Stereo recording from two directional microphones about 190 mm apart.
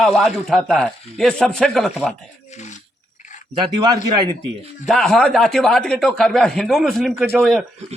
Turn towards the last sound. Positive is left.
turn(degrees=0)  # may be behind; listen again after turning